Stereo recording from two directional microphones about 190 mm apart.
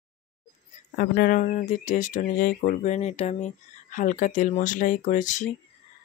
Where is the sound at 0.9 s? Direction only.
50° left (ahead or behind).